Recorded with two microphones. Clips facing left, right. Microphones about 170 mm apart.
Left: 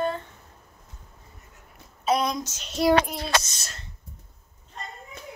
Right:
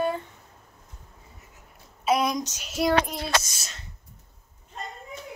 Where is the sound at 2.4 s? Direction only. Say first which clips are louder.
Right 2 dB; 15° right (ahead or behind).